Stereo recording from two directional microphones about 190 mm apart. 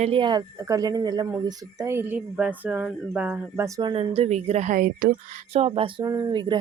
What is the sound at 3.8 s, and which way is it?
Speech, 25° right (ahead or behind).